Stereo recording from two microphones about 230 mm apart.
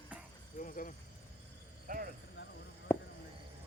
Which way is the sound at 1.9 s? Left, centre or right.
Right.